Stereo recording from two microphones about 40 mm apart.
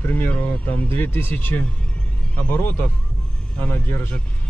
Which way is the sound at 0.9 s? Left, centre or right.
Left.